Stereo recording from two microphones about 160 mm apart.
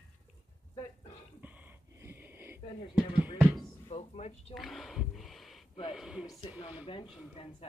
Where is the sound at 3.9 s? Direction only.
40° left (ahead or behind).